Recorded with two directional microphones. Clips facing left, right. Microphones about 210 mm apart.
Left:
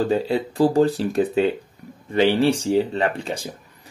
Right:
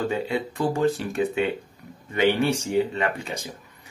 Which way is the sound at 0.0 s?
35° left (ahead or behind).